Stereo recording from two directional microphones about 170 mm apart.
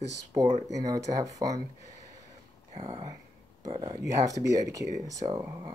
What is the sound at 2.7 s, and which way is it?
Speech, 30° right (ahead or behind).